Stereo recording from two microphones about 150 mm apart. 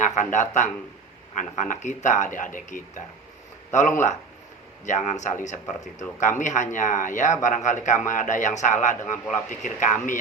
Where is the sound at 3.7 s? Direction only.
55° left (ahead or behind).